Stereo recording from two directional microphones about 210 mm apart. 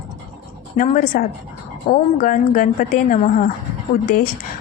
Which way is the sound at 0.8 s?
40° left (ahead or behind).